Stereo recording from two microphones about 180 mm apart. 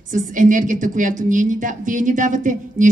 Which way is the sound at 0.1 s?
45° right (ahead or behind).